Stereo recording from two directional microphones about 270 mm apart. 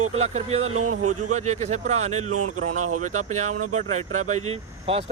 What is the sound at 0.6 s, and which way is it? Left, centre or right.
Speech, right.